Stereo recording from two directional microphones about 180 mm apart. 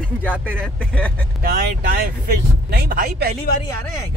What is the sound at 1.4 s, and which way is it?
Speech, 55° right (ahead or behind).